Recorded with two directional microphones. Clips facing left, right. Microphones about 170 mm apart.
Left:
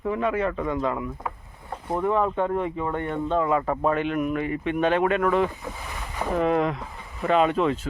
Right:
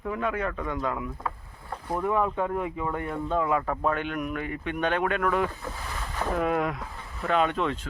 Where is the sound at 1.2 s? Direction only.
20° left (ahead or behind).